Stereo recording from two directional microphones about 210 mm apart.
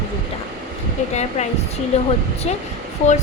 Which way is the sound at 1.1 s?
30° left (ahead or behind).